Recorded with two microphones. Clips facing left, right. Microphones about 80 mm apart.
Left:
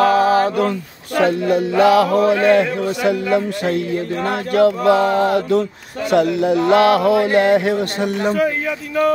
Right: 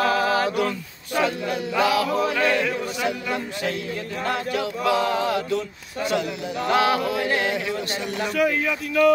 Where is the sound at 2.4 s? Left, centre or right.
Left.